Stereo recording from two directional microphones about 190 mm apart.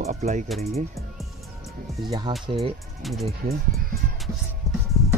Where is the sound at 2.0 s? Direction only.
20° right (ahead or behind).